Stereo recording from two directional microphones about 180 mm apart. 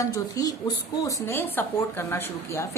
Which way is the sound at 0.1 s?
20° left (ahead or behind).